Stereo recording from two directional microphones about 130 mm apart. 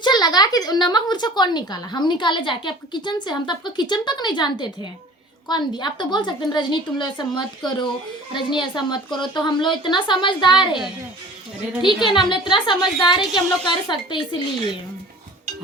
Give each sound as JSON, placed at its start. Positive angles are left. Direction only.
{"t": 0.0, "sound": "a woman's voice", "side_deg": 35}
{"t": 11.8, "sound": "a woman's voice", "side_deg": 35}